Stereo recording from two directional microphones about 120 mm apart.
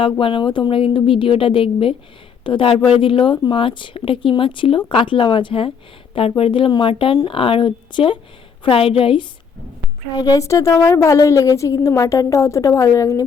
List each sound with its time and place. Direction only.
0.0 s a woman's voice: 45° left (ahead or behind)
10.2 s a woman's voice: 30° left (ahead or behind)